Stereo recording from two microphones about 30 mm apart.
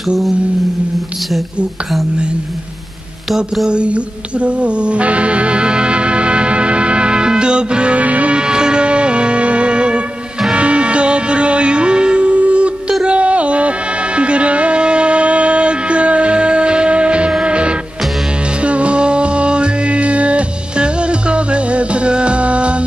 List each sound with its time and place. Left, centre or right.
3.6 s music: right
8.0 s music: right
8.4 s a sound: right
8.8 s music: right